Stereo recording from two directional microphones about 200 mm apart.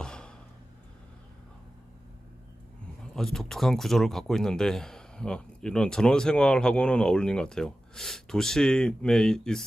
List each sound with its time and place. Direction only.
0.0 s gasp: 5° left (ahead or behind)
3.2 s speech: centre (ahead or behind)